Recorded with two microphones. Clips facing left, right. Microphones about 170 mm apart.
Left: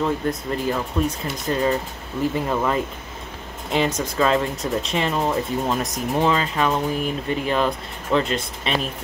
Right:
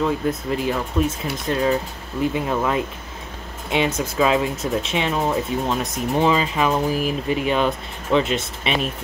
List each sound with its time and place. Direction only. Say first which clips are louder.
0.0 s speech: right 1 dB; 5° right (ahead or behind)
4.0 s speech: right 1 dB; 5° right (ahead or behind)